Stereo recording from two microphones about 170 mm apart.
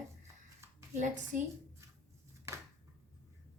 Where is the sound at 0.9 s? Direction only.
45° right (ahead or behind).